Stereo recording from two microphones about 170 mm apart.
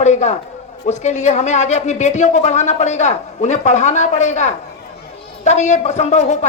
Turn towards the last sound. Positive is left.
turn(degrees=45)  # may be behind; listen again after turning